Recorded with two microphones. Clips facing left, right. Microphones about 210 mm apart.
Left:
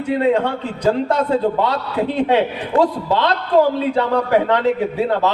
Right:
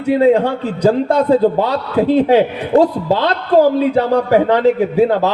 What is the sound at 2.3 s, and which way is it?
A man's voice, 40° right (ahead or behind).